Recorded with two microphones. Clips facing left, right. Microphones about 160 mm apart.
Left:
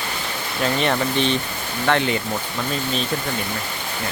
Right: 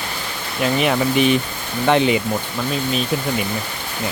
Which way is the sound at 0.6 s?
5° right (ahead or behind).